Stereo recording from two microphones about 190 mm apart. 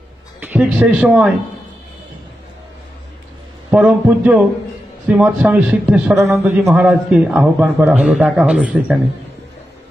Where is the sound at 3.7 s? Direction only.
5° right (ahead or behind).